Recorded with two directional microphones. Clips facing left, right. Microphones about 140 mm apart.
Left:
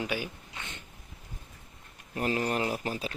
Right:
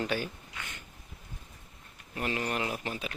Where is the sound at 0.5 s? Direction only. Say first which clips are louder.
Left 1 dB; 25° left (ahead or behind).